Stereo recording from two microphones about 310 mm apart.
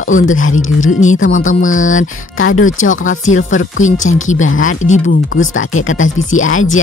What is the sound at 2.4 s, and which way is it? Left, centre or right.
Speech, left.